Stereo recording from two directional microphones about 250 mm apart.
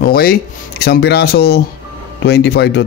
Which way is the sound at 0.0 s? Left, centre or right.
Left.